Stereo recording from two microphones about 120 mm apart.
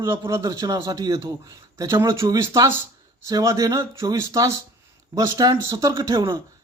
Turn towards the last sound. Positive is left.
turn(degrees=-30)  # may be behind; listen again after turning